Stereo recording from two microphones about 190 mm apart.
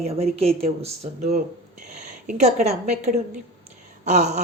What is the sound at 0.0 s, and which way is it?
A woman's voice, 35° right (ahead or behind).